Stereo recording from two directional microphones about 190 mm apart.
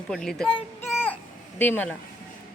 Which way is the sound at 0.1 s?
5° left (ahead or behind).